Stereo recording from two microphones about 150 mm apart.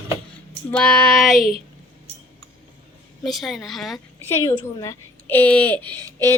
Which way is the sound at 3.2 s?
Centre (ahead or behind).